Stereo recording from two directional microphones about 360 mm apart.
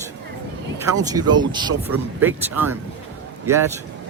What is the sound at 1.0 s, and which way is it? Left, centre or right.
Speech, centre.